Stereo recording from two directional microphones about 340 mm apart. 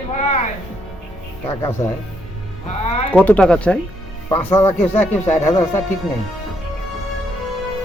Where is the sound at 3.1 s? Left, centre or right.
Centre.